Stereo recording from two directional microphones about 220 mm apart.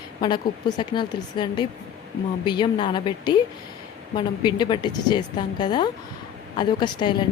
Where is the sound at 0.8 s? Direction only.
20° left (ahead or behind).